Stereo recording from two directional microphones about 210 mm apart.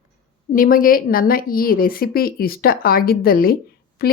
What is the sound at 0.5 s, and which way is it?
A woman's voice, 40° left (ahead or behind).